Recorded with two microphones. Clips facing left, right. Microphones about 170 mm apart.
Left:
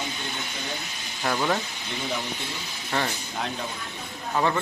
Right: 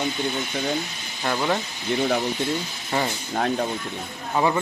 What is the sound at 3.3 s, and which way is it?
Speech, 50° right (ahead or behind).